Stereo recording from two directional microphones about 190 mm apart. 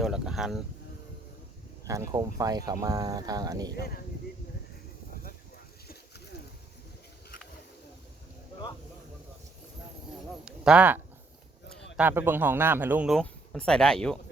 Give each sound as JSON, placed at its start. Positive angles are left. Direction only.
{"t": 0.0, "sound": "a sound", "side_deg": -5}
{"t": 1.8, "sound": "speech", "side_deg": -15}
{"t": 3.8, "sound": "speech", "side_deg": 55}
{"t": 10.4, "sound": "a man's voice", "side_deg": -5}
{"t": 13.1, "sound": "speech", "side_deg": 5}